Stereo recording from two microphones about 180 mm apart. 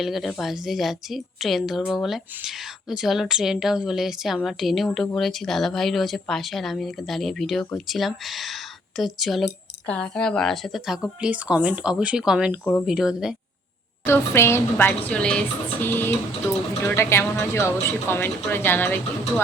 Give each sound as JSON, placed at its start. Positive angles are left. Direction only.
{"t": 0.0, "sound": "a woman's voice", "side_deg": 0}
{"t": 14.0, "sound": "a woman's voice", "side_deg": 15}